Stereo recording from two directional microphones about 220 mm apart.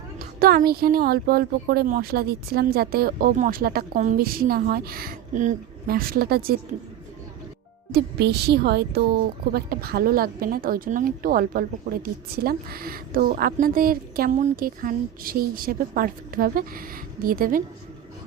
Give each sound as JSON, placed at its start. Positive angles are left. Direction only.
{"t": 0.2, "sound": "speech", "side_deg": -40}
{"t": 7.9, "sound": "a woman's voice", "side_deg": -45}